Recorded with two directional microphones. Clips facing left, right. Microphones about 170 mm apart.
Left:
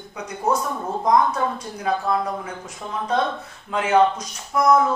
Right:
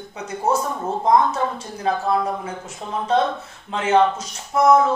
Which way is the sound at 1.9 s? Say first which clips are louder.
Right 1 dB; 30° right (ahead or behind).